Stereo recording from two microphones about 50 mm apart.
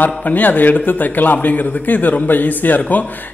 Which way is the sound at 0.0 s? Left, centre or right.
Left.